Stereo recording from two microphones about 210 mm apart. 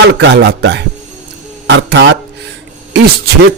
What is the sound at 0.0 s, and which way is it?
Speech, 55° right (ahead or behind).